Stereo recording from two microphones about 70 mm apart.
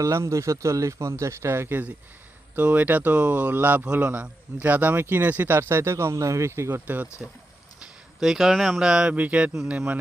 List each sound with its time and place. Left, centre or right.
0.0 s speech: right
6.8 s speech: right
8.2 s speech: centre